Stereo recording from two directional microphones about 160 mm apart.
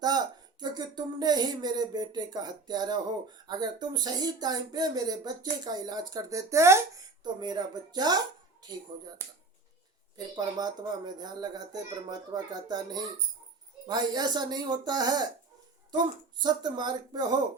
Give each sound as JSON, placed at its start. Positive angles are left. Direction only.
{"t": 0.6, "sound": "speech", "side_deg": -25}
{"t": 10.3, "sound": "speech", "side_deg": -25}
{"t": 16.4, "sound": "speech", "side_deg": -25}